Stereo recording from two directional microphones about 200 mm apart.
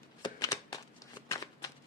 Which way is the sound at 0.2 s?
15° left (ahead or behind).